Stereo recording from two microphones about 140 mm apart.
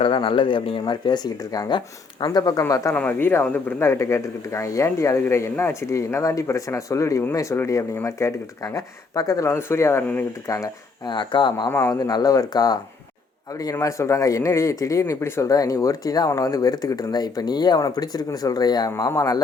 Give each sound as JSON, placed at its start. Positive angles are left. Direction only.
{"t": 0.0, "sound": "speech", "side_deg": 35}
{"t": 2.9, "sound": "speech", "side_deg": 10}
{"t": 11.7, "sound": "speech", "side_deg": 15}
{"t": 11.9, "sound": "speech", "side_deg": 25}